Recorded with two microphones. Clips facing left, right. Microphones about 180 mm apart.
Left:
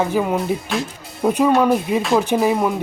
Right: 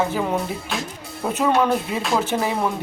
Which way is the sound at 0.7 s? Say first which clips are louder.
Left 3 dB; centre (ahead or behind).